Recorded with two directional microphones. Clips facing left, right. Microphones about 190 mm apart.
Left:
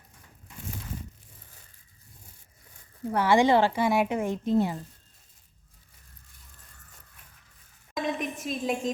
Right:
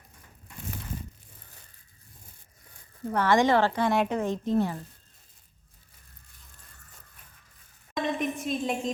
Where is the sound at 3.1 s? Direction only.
10° left (ahead or behind).